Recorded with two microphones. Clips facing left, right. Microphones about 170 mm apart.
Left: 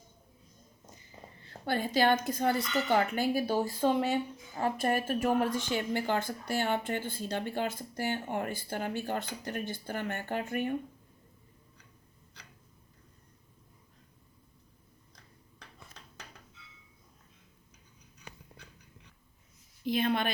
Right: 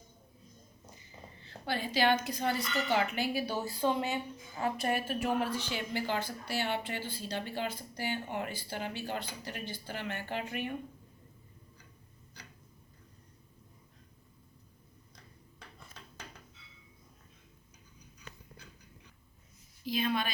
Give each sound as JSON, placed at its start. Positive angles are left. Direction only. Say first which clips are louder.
{"t": 1.5, "sound": "speech", "louder": "left 4 dB", "side_deg": 50}
{"t": 19.8, "sound": "a woman's voice", "louder": "left 3 dB", "side_deg": 55}